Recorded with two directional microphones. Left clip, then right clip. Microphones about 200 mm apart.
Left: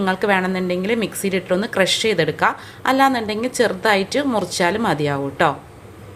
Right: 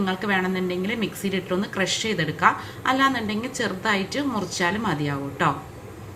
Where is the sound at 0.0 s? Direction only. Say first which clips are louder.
Left 6 dB; 50° left (ahead or behind).